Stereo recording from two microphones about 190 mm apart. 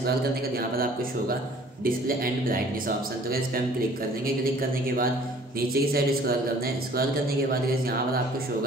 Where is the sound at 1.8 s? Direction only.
50° right (ahead or behind).